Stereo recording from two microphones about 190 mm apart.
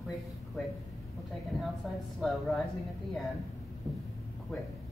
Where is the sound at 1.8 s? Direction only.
Centre (ahead or behind).